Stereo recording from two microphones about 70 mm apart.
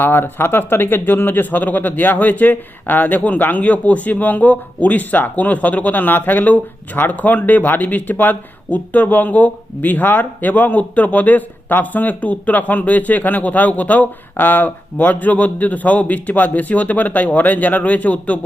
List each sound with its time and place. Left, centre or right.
0.0 s speech: left